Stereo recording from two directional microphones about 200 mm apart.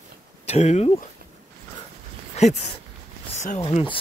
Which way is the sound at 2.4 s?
35° left (ahead or behind).